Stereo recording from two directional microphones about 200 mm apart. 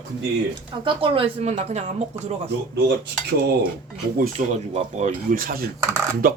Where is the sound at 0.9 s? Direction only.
25° right (ahead or behind).